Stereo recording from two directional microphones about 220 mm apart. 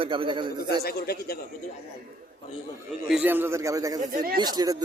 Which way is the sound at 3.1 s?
5° right (ahead or behind).